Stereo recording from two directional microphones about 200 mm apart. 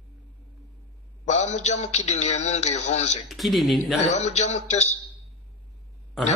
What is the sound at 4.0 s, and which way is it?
Speech, 35° left (ahead or behind).